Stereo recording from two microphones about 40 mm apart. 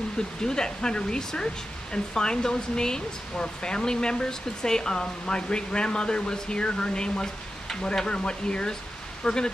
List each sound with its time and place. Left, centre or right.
0.4 s speech: centre